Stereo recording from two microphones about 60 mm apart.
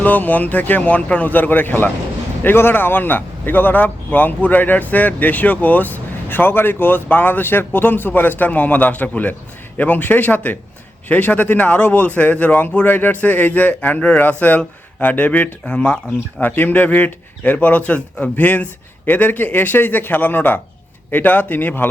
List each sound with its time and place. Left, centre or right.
0.0 s a man's voice: left
16.4 s a man's voice: left